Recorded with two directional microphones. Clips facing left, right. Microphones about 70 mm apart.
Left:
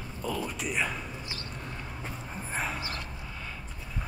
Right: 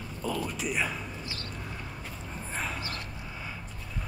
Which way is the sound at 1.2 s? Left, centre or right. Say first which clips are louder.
Right 1 dB; centre.